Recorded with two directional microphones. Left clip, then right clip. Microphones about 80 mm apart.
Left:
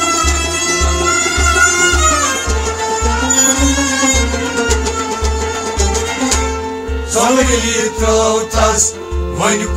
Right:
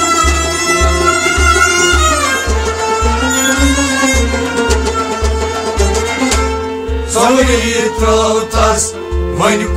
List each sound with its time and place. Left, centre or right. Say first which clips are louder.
0.7 s music: right 4 dB; right
7.2 s music: right 2 dB; right